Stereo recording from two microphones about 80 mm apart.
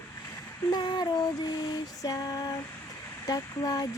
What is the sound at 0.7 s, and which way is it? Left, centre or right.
Female singing, left.